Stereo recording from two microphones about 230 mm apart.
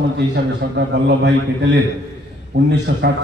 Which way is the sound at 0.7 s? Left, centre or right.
Right.